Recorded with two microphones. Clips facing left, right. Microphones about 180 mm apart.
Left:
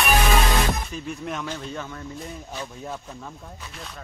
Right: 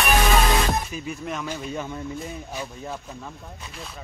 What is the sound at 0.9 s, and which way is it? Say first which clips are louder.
Speech: even; 5° right (ahead or behind).